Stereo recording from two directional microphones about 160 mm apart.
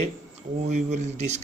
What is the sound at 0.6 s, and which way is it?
Speech, 45° right (ahead or behind).